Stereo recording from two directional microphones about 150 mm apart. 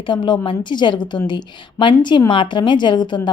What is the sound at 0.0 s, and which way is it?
A woman's voice, 35° left (ahead or behind).